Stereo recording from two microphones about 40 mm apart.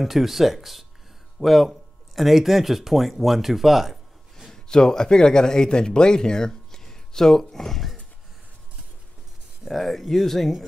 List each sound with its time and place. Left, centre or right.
0.0 s speech: centre
4.6 s speech: centre
9.7 s speech: centre